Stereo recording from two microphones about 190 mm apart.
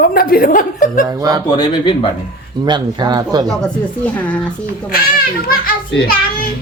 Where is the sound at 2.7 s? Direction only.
20° right (ahead or behind).